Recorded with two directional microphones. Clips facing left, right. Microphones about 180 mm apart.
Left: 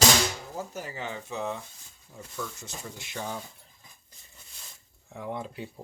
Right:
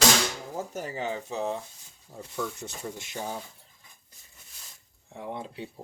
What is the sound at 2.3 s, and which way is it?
Speech, 60° right (ahead or behind).